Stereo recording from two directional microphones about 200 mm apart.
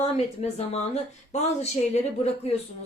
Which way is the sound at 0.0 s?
30° left (ahead or behind).